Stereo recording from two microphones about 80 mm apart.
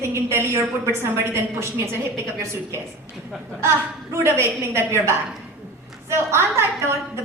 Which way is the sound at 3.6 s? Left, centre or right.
Right.